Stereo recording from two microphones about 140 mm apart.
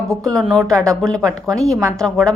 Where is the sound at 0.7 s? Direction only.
20° right (ahead or behind).